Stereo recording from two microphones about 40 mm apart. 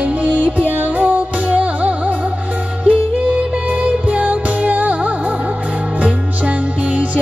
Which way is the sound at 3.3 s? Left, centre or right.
Right.